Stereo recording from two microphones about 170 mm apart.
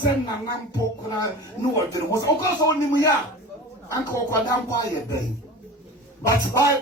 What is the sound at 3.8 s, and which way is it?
Speech, 15° left (ahead or behind).